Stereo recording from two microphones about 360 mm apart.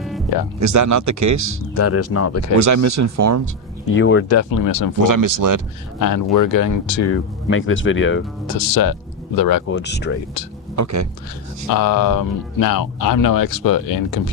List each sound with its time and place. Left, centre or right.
0.6 s speech: right
1.8 s speech: left
2.6 s speech: right
3.9 s speech: left
4.4 s speech: left
5.0 s speech: right
6.0 s speech: left
7.1 s speech: left
8.5 s speech: left
9.6 s speech: left
10.8 s speech: right
11.7 s speech: left